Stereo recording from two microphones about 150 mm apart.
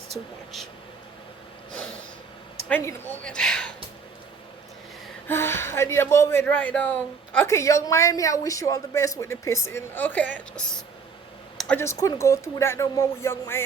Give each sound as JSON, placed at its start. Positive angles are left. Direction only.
{"t": 2.6, "sound": "speech", "side_deg": 10}
{"t": 5.3, "sound": "a woman's voice", "side_deg": 15}
{"t": 11.8, "sound": "a woman's voice", "side_deg": 20}